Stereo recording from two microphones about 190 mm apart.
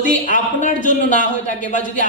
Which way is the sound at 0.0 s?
45° left (ahead or behind).